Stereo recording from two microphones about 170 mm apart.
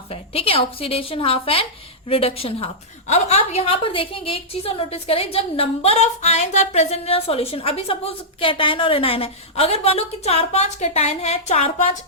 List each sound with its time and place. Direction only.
0.1 s a woman's voice: 35° left (ahead or behind)